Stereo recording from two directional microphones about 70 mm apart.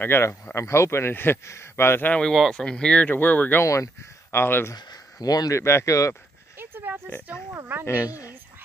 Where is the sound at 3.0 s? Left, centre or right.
Left.